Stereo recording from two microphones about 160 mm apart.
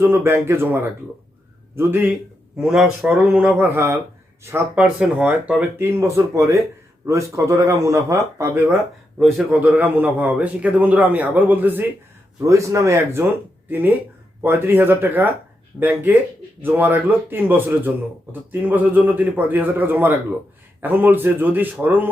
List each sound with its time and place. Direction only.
0.0 s speech: 15° right (ahead or behind)
3.8 s speech: 15° right (ahead or behind)
9.1 s speech: 5° right (ahead or behind)